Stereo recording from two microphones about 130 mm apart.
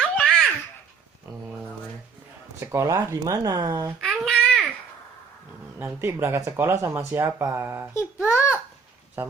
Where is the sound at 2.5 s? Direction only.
25° right (ahead or behind).